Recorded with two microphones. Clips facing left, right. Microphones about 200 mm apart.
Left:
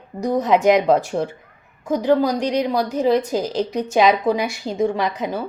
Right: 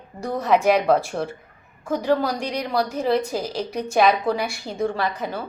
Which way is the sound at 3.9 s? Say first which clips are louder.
Left 2 dB; 15° left (ahead or behind).